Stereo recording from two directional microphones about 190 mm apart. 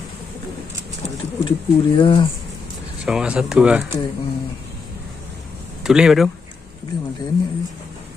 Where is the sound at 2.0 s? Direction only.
25° left (ahead or behind).